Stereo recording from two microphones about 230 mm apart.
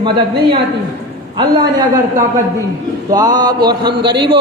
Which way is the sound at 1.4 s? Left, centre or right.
Centre.